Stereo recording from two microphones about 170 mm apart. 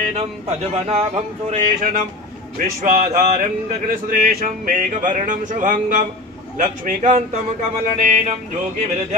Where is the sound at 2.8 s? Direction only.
50° right (ahead or behind).